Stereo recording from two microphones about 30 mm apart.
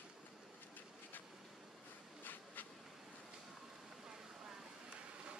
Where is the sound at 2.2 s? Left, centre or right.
Left.